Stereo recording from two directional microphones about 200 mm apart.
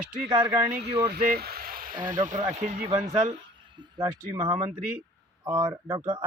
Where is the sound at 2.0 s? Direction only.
40° right (ahead or behind); by 4.6 s 20° right (ahead or behind).